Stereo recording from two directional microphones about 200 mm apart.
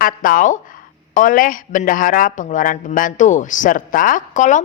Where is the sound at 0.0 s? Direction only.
45° left (ahead or behind).